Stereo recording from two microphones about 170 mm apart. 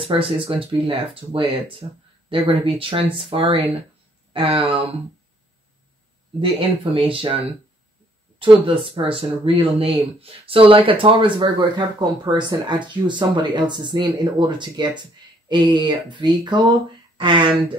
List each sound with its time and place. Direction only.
0.0 s speech: 30° right (ahead or behind)
6.4 s speech: 30° right (ahead or behind)